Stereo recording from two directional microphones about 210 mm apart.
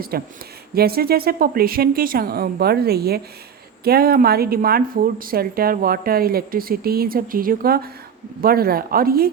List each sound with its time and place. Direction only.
0.1 s speech: 45° right (ahead or behind)